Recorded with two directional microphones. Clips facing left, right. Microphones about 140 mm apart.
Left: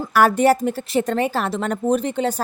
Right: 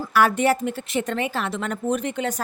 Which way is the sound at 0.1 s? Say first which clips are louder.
Left 4 dB; 40° left (ahead or behind).